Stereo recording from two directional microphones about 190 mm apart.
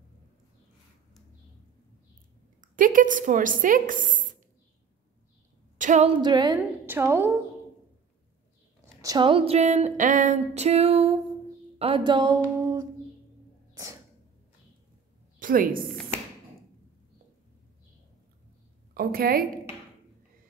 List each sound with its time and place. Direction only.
2.6 s speech: 45° right (ahead or behind)
5.8 s female singing: 40° right (ahead or behind)
6.2 s a woman's voice: 20° right (ahead or behind)
9.0 s a sound: 25° right (ahead or behind)
11.8 s speech: 25° right (ahead or behind)
15.3 s a woman's voice: 45° right (ahead or behind)
18.9 s a woman's voice: 50° right (ahead or behind)